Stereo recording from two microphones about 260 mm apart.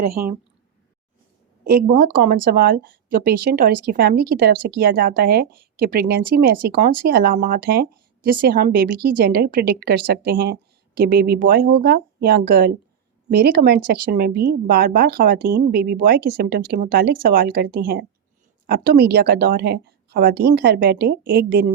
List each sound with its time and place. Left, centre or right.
1.6 s speech: right